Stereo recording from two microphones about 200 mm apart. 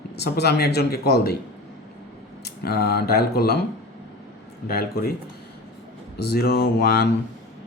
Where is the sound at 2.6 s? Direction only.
50° left (ahead or behind).